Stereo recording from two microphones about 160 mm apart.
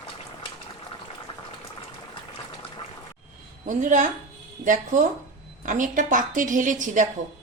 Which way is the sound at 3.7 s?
50° right (ahead or behind).